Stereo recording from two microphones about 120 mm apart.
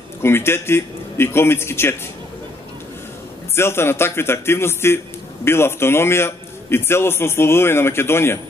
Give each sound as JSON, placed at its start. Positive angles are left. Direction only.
{"t": 0.2, "sound": "a man's voice", "side_deg": 20}
{"t": 3.5, "sound": "a man's voice", "side_deg": 20}